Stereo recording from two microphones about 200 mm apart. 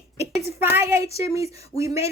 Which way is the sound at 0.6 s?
10° right (ahead or behind).